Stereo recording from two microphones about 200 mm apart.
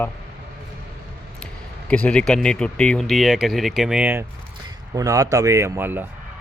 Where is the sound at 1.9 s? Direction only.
5° left (ahead or behind).